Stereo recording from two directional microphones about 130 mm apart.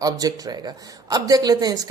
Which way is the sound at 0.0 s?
30° right (ahead or behind).